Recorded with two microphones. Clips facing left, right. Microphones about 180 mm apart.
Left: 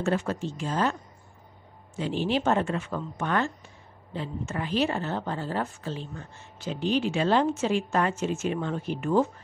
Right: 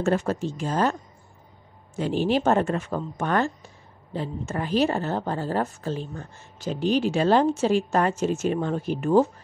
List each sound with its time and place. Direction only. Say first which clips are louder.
0.0 s speech: right 4 dB; 45° right (ahead or behind)
2.0 s a woman's voice: right 4 dB; 45° right (ahead or behind)